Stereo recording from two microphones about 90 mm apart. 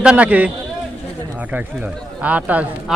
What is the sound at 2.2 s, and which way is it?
Speech, 15° right (ahead or behind).